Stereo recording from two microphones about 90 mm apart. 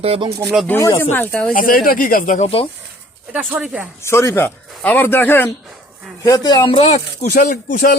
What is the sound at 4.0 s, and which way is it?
Speech, 30° left (ahead or behind).